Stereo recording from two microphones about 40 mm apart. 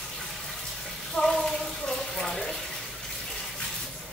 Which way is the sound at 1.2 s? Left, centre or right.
Centre.